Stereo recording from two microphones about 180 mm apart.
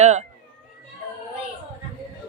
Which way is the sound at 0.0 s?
40° right (ahead or behind).